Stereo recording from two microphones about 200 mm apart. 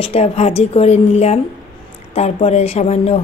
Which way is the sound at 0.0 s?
30° left (ahead or behind).